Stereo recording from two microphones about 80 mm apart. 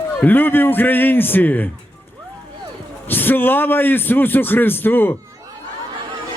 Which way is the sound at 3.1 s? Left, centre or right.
Left.